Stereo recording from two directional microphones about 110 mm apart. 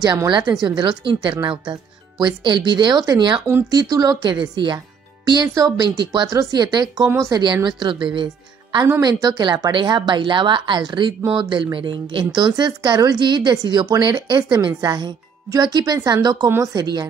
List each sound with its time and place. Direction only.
0.0 s speech: 35° right (ahead or behind)
7.1 s speech: 25° right (ahead or behind)
7.6 s speech: 45° right (ahead or behind)
9.0 s speech: 40° right (ahead or behind)